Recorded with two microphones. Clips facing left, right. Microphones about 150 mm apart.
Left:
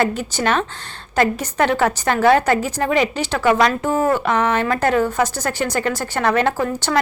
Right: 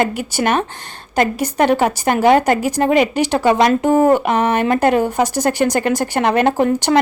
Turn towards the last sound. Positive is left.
turn(degrees=-20)  # may be behind; listen again after turning